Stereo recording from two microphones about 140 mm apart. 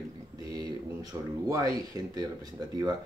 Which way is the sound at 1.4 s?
20° right (ahead or behind).